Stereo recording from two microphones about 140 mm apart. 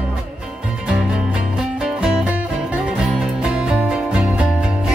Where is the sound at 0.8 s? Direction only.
5° right (ahead or behind).